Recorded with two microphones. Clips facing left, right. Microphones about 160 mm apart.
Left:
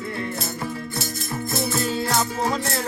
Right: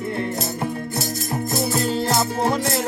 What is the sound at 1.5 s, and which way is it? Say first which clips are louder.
Music: right 2 dB; 40° right (ahead or behind).